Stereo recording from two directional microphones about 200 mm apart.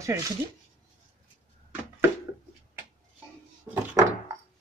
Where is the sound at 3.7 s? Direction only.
5° right (ahead or behind).